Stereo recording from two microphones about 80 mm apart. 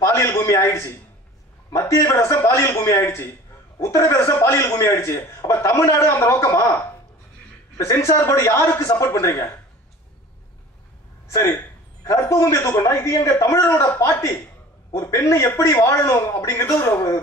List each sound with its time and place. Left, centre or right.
0.0 s a sound: left
1.7 s a man's voice: left
12.0 s a man's voice: left